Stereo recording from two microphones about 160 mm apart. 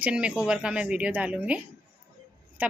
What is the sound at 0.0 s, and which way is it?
Speech, 5° right (ahead or behind).